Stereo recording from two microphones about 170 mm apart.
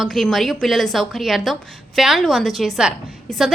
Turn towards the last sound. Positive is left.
turn(degrees=0)  # may be behind; listen again after turning